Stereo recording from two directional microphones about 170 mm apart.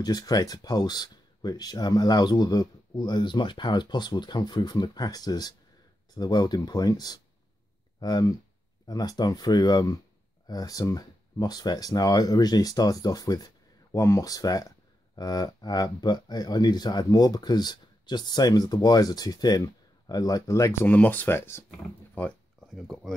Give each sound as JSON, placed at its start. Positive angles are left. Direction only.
{"t": 0.0, "sound": "speech", "side_deg": 25}